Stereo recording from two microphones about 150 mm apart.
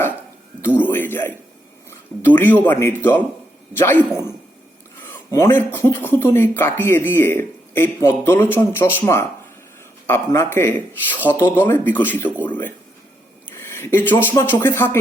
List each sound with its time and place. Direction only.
0.9 s speech: 15° left (ahead or behind)